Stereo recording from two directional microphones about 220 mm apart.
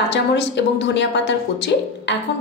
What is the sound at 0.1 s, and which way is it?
A woman's voice, 50° left (ahead or behind).